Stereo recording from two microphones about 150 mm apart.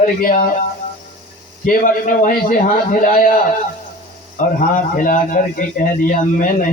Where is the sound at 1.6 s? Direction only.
60° left (ahead or behind).